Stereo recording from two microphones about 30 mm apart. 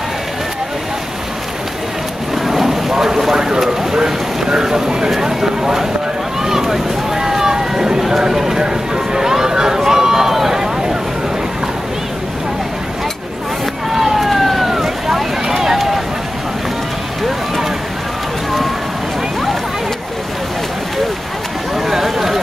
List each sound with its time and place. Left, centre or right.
2.4 s boat: centre
3.9 s a sound: right
6.4 s boat: centre
8.3 s clip-clop: centre
8.9 s run: centre
13.9 s vehicle: centre
14.7 s boat: centre
15.4 s run: centre
21.8 s a sound: centre